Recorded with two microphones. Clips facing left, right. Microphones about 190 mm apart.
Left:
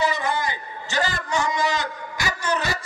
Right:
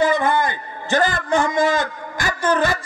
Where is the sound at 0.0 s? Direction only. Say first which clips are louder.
Right 6 dB; 55° right (ahead or behind).